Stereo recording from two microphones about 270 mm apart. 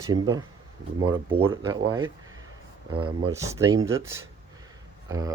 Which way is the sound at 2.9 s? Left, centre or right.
Centre.